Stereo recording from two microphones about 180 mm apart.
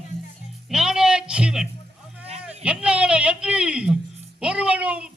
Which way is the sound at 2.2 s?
35° right (ahead or behind).